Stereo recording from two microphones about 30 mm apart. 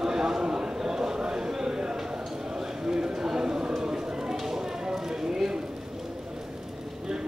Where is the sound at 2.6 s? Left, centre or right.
Centre.